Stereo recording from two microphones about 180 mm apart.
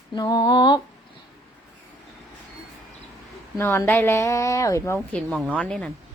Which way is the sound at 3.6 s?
15° left (ahead or behind).